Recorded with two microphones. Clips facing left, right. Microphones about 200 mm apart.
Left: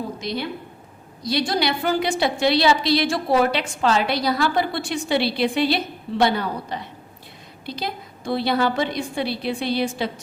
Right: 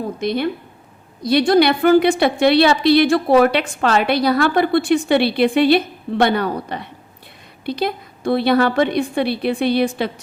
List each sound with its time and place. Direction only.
0.2 s a woman's voice: 55° right (ahead or behind)